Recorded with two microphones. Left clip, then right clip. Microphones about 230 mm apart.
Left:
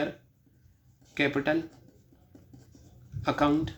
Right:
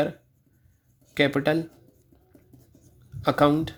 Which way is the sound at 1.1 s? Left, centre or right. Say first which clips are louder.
Right 5 dB; right.